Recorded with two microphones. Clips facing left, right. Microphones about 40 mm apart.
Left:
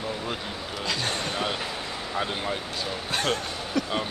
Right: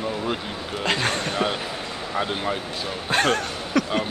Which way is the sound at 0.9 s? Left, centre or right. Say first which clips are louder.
Right 6 dB; right.